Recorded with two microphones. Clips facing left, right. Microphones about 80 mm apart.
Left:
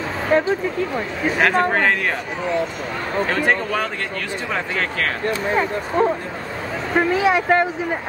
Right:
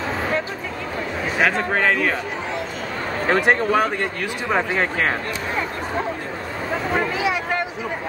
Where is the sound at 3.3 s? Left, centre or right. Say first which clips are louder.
Right 5 dB; centre.